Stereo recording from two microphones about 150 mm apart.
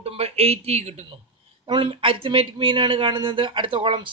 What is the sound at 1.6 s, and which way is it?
Speech, 35° right (ahead or behind).